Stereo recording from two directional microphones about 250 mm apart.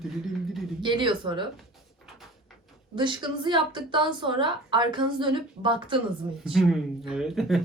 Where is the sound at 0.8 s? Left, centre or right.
Centre.